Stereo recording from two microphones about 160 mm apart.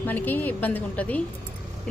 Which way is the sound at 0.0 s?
10° left (ahead or behind).